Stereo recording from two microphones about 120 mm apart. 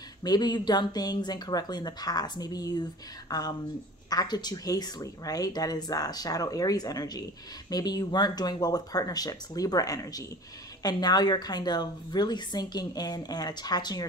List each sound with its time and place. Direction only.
0.2 s a woman's voice: 35° left (ahead or behind)